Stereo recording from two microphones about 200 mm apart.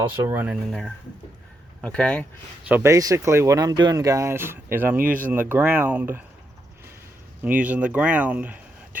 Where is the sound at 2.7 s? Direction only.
15° right (ahead or behind).